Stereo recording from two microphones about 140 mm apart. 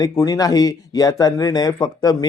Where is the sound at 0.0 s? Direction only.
25° left (ahead or behind).